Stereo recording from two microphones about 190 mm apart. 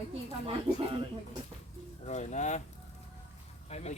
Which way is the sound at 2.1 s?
40° left (ahead or behind).